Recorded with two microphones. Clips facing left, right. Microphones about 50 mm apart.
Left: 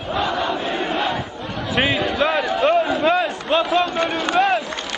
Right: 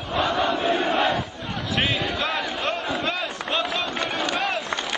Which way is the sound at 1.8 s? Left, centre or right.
Centre.